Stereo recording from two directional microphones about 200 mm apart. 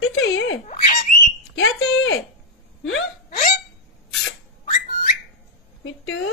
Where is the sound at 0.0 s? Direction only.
90° left.